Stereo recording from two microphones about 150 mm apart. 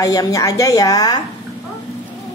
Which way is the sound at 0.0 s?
25° left (ahead or behind).